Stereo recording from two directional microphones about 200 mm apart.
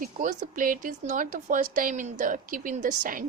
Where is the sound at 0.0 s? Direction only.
40° right (ahead or behind).